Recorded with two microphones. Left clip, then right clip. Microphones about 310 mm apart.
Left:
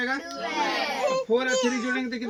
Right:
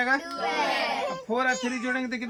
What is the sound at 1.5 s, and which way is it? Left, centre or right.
Speech, left.